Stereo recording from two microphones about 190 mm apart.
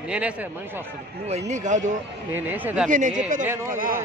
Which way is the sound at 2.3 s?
10° right (ahead or behind).